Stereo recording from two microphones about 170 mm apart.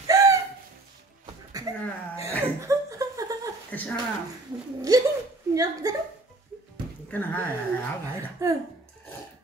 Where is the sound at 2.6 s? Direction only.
20° right (ahead or behind).